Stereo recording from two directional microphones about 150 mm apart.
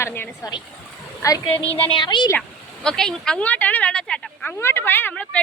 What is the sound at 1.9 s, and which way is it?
Speech, 30° left (ahead or behind).